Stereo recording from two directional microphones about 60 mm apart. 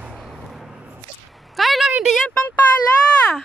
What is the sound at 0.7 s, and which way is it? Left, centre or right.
Whip, right.